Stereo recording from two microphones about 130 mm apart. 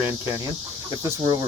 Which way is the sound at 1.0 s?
30° right (ahead or behind).